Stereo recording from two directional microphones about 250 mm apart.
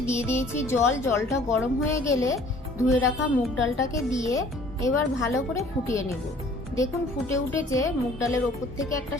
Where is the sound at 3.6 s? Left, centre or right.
Centre.